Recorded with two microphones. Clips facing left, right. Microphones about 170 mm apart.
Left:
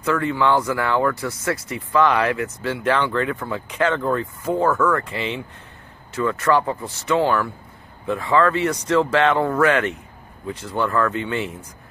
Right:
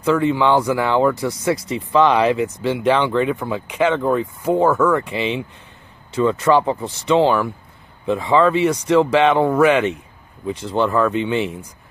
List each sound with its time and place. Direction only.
0.0 s speech: 20° right (ahead or behind)